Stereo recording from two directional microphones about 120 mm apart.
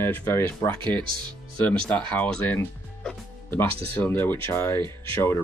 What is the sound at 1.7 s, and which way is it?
Speech, 10° left (ahead or behind).